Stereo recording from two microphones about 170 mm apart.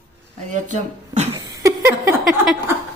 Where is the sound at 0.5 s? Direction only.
45° right (ahead or behind).